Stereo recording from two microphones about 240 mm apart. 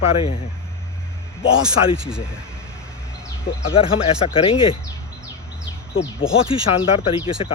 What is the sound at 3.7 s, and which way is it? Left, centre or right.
Speech, left.